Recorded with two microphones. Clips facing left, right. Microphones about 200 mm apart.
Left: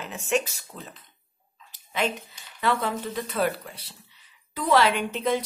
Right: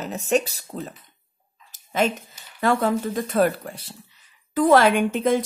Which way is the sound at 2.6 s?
45° right (ahead or behind).